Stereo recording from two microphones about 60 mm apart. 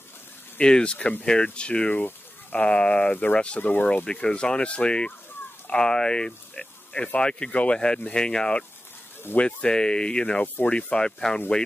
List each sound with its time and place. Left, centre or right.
0.6 s speech: centre
10.4 s speech: left
10.7 s speech: centre